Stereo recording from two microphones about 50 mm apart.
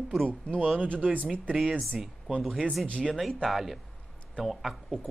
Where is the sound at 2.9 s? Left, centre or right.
Centre.